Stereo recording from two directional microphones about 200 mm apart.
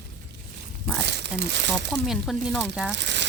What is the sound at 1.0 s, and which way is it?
Crumpling, 60° right (ahead or behind).